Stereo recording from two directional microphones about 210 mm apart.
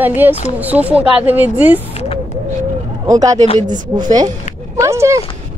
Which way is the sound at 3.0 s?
15° right (ahead or behind).